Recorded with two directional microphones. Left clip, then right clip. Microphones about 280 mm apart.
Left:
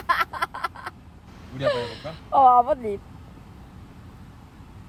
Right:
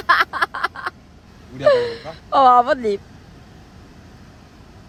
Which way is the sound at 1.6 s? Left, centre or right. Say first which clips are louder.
Right 9 dB; right.